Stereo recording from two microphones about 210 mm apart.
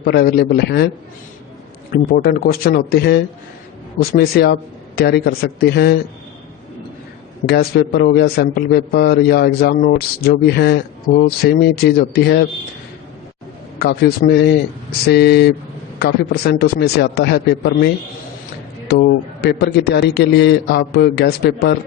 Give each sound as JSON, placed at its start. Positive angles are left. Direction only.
{"t": 0.0, "sound": "a man's voice", "side_deg": 50}
{"t": 1.9, "sound": "a man's voice", "side_deg": 45}
{"t": 7.4, "sound": "a man's voice", "side_deg": 50}
{"t": 13.7, "sound": "a man's voice", "side_deg": 50}